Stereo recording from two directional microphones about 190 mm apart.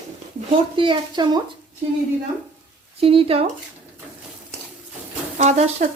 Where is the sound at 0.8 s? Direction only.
25° right (ahead or behind).